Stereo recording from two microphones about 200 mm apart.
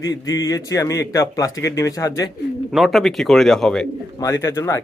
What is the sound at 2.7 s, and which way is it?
Speech, centre (ahead or behind).